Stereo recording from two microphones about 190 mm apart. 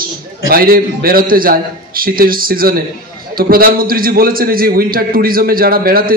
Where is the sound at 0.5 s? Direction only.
50° right (ahead or behind).